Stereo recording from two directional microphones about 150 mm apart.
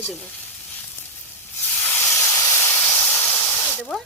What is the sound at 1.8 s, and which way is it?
Steam, 20° left (ahead or behind).